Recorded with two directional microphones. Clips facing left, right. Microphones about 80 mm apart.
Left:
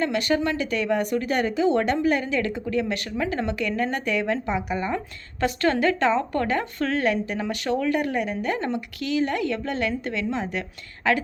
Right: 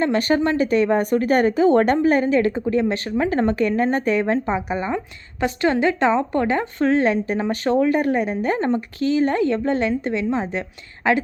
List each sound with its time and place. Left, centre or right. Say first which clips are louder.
0.0 s a woman's voice: right 4 dB; right